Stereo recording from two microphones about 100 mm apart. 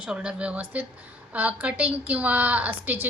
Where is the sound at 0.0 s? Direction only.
10° right (ahead or behind).